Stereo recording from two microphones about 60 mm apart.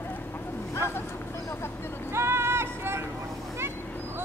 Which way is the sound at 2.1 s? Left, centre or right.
Right.